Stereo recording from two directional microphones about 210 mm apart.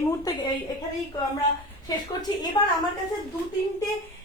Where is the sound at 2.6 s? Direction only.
20° left (ahead or behind).